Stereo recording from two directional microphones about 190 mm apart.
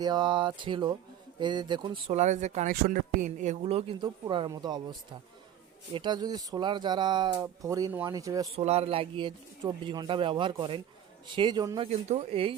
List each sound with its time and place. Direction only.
0.0 s speech: 20° right (ahead or behind)
8.5 s speech: 35° right (ahead or behind)
11.9 s speech: 35° right (ahead or behind)